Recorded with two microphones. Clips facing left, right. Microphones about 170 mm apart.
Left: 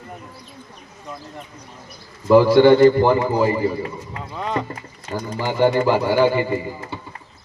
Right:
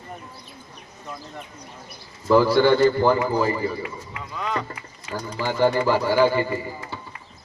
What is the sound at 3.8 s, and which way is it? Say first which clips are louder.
Speech: left 4 dB; 35° left (ahead or behind).